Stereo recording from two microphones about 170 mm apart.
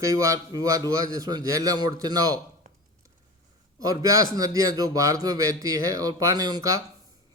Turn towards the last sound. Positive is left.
turn(degrees=-20)  # may be behind; listen again after turning